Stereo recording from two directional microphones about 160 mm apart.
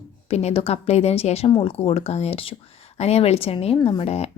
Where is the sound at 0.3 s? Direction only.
40° left (ahead or behind).